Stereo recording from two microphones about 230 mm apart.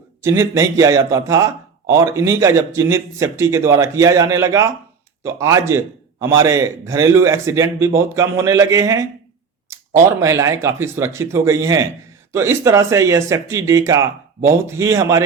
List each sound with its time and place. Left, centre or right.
0.2 s a man's voice: centre
10.2 s a man's voice: centre